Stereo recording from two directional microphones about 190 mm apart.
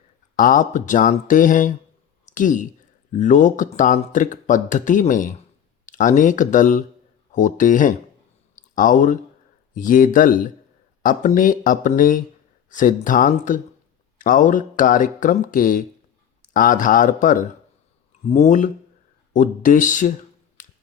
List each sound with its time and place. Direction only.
0.3 s speech: 45° left (ahead or behind)
20.6 s finger snapping: 40° left (ahead or behind)